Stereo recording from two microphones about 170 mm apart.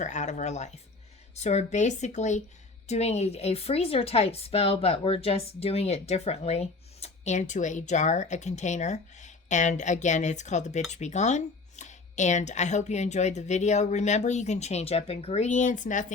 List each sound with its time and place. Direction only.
0.0 s a woman's voice: 45° left (ahead or behind)